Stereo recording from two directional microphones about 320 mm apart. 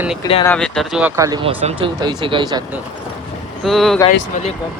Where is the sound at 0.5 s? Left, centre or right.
Centre.